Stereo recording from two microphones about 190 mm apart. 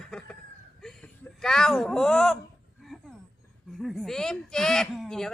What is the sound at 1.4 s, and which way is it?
Speech, 5° left (ahead or behind).